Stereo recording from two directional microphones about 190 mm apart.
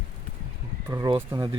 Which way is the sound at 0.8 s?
10° right (ahead or behind).